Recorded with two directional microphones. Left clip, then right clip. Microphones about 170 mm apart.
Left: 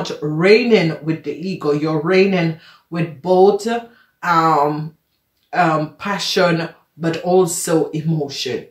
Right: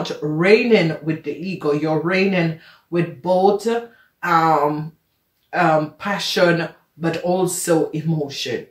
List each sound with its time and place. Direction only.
0.0 s speech: 25° left (ahead or behind)